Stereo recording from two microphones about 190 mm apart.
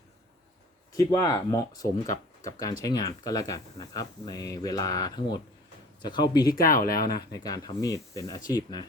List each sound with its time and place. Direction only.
0.9 s speech: 20° left (ahead or behind)
6.8 s speech: 50° left (ahead or behind)
7.2 s speech: 20° left (ahead or behind)